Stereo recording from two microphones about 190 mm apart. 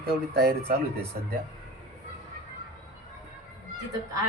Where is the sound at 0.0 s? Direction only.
55° right (ahead or behind).